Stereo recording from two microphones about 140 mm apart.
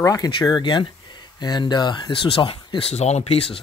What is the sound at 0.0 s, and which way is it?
A man's voice, 25° left (ahead or behind).